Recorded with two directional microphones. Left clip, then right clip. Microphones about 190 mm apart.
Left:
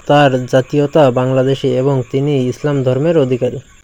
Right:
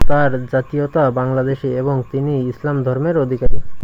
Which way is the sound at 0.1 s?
35° left (ahead or behind).